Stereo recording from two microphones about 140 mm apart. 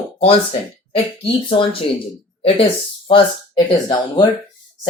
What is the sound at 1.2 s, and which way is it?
Speech, 40° left (ahead or behind).